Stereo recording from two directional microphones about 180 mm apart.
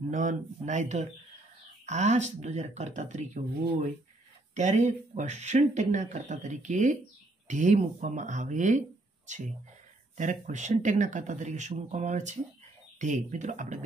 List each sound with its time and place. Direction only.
0.1 s speech: 45° right (ahead or behind)
4.6 s speech: 40° right (ahead or behind)